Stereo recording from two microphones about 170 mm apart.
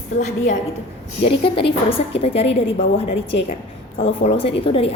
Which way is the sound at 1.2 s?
30° left (ahead or behind).